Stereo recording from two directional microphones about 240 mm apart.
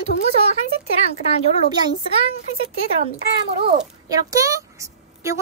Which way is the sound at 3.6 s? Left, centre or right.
Centre.